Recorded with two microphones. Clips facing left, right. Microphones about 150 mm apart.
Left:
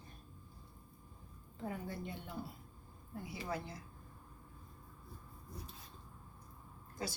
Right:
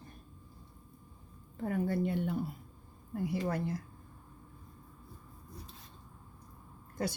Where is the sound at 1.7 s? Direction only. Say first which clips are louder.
Right 12 dB; 65° right (ahead or behind).